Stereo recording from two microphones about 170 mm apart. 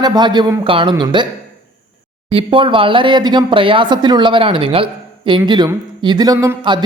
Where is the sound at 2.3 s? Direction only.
30° right (ahead or behind).